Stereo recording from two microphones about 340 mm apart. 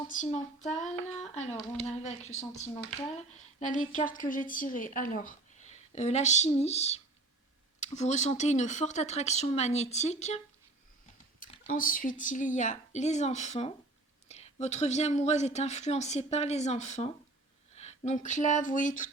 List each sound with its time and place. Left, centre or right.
0.1 s speech: left